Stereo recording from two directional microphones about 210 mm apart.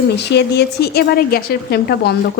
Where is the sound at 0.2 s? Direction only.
55° left (ahead or behind).